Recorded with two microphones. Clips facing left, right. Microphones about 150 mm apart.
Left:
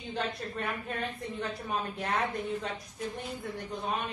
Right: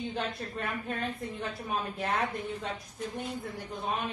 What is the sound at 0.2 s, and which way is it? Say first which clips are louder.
A woman's voice: even; centre (ahead or behind).